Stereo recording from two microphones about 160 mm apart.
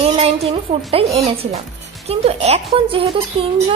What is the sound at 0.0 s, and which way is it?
Speech, 35° right (ahead or behind).